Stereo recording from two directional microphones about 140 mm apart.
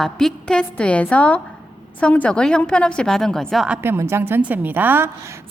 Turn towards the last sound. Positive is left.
turn(degrees=-20)  # may be behind; listen again after turning